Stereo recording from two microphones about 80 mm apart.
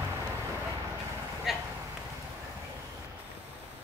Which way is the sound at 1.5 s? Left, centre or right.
Centre.